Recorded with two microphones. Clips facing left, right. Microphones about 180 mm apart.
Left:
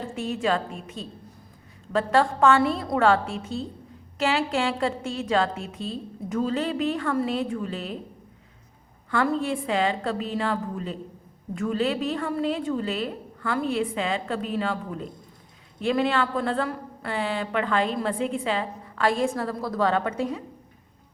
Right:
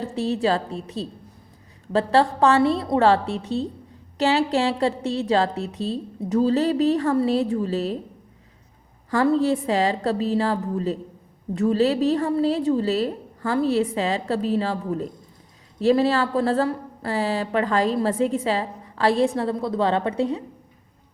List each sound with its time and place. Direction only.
0.0 s a woman's voice: 35° right (ahead or behind)
9.0 s a woman's voice: 35° right (ahead or behind)